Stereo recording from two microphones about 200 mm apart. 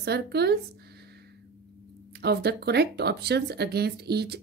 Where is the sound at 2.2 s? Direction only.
55° right (ahead or behind).